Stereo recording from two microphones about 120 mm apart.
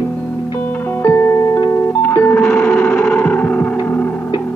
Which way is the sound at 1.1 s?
20° left (ahead or behind).